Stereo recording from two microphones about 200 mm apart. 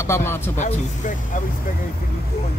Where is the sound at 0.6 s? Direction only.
40° left (ahead or behind).